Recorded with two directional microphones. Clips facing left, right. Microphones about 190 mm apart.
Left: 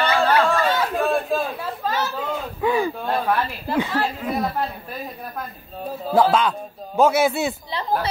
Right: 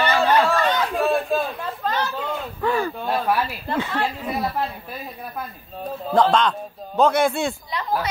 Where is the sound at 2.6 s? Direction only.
15° left (ahead or behind).